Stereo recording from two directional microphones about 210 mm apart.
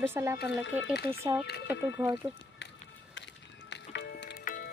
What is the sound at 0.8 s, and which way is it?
Speech, 50° left (ahead or behind).